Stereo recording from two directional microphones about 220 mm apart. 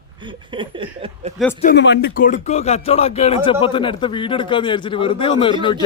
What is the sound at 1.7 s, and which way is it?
Speech, 50° left (ahead or behind).